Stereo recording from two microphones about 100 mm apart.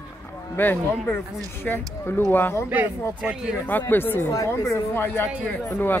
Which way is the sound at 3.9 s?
20° left (ahead or behind).